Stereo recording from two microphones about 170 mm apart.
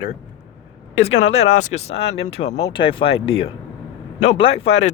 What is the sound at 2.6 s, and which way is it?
Speech, 30° left (ahead or behind).